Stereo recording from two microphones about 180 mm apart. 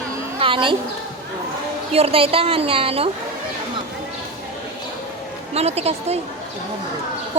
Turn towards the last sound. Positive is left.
turn(degrees=-35)  # may be behind; listen again after turning